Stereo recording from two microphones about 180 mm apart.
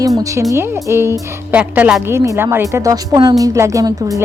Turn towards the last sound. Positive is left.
turn(degrees=-20)  # may be behind; listen again after turning